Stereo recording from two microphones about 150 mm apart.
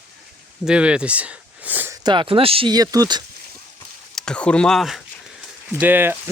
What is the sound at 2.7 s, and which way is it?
Speech, 25° right (ahead or behind).